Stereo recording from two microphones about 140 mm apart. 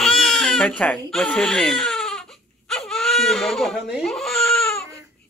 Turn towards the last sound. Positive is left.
turn(degrees=5)  # may be behind; listen again after turning